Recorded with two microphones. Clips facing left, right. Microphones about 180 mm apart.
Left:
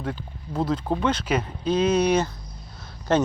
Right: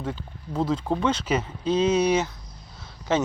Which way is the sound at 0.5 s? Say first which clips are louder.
Even; 10° left (ahead or behind).